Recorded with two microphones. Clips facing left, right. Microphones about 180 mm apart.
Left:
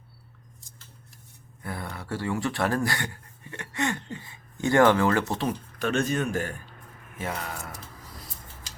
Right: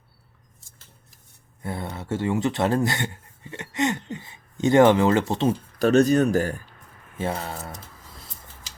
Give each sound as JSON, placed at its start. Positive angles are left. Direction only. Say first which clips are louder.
{"t": 1.6, "sound": "speech", "louder": "right 4 dB", "side_deg": -25}
{"t": 5.8, "sound": "speech", "louder": "right 9 dB", "side_deg": -40}